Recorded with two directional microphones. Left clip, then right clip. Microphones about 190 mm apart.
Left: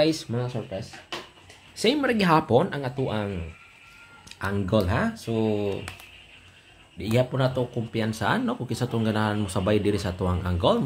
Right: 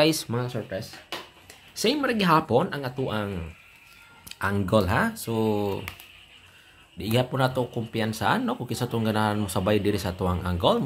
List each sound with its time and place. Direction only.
0.0 s speech: 20° right (ahead or behind)
1.8 s speech: centre (ahead or behind)
4.3 s speech: 20° right (ahead or behind)
7.0 s speech: 20° right (ahead or behind)